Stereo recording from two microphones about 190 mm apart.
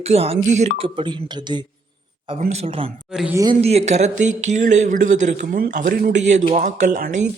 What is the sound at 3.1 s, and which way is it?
Speech, 5° right (ahead or behind).